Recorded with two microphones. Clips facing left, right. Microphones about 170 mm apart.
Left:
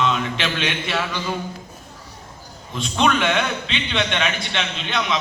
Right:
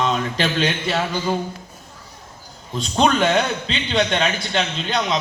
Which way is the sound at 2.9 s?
35° right (ahead or behind).